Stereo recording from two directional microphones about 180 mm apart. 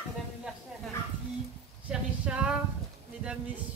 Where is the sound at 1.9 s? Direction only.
5° right (ahead or behind).